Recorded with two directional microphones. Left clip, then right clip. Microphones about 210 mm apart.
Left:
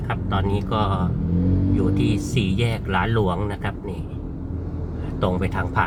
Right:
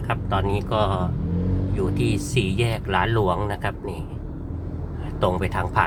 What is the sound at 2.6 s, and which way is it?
Speech, 15° right (ahead or behind).